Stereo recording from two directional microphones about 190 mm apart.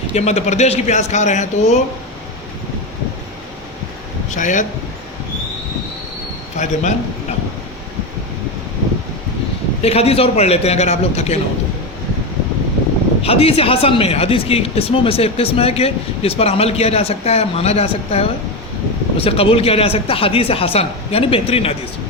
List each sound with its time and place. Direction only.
0.1 s speech: 35° left (ahead or behind)
4.3 s speech: 40° left (ahead or behind)
6.6 s a man's voice: 40° left (ahead or behind)
9.8 s speech: 30° left (ahead or behind)
13.2 s speech: 30° left (ahead or behind)